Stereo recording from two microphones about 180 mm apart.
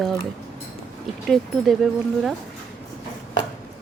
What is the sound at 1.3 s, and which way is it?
Speech, centre (ahead or behind).